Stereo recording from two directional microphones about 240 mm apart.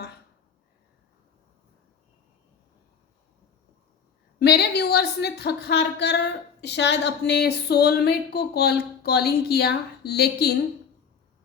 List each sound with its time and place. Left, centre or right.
4.4 s a woman's voice: left